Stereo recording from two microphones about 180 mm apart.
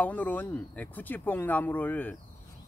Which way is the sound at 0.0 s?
10° left (ahead or behind).